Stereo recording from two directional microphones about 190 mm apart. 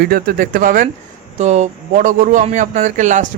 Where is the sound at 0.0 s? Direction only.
50° right (ahead or behind).